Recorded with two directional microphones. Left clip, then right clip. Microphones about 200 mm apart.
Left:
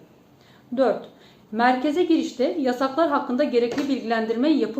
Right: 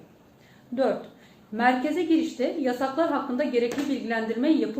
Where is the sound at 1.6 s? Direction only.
15° left (ahead or behind).